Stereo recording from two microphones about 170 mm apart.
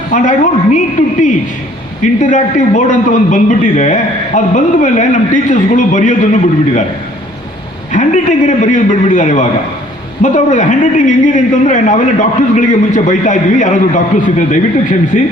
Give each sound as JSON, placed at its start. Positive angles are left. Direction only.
{"t": 0.1, "sound": "a man's voice", "side_deg": 50}
{"t": 2.2, "sound": "a man's voice", "side_deg": 50}
{"t": 7.9, "sound": "a man's voice", "side_deg": 45}